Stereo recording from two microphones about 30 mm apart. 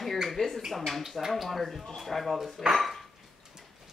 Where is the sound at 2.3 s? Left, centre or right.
Centre.